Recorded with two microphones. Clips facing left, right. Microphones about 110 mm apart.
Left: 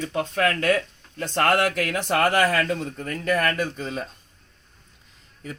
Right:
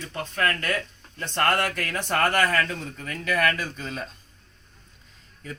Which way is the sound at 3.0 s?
30° left (ahead or behind).